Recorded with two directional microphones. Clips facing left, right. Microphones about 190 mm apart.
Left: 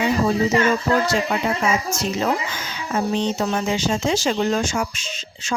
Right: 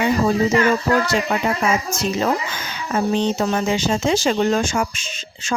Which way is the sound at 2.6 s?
60° right (ahead or behind).